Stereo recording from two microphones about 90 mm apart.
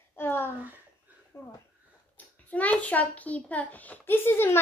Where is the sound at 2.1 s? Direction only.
15° left (ahead or behind).